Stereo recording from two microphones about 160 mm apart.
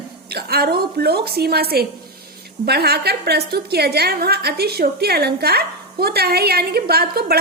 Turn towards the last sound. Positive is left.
turn(degrees=-75)  # may be behind; listen again after turning